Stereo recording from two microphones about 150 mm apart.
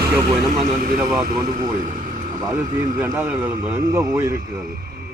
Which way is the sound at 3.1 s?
15° right (ahead or behind).